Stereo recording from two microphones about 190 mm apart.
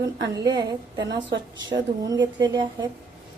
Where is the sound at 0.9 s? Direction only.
65° right (ahead or behind).